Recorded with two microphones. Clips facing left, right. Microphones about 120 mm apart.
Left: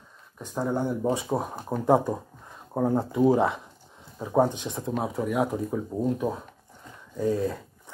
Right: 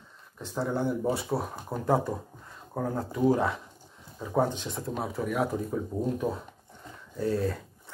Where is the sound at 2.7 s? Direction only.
20° left (ahead or behind).